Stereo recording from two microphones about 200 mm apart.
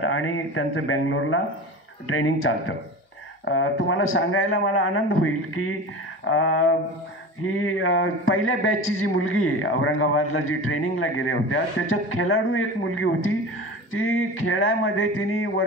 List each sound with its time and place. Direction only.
0.0 s a man's voice: 90° left
3.4 s a man's voice: 75° left (ahead or behind)